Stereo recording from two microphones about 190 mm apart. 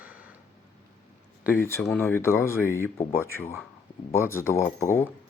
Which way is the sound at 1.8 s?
5° left (ahead or behind).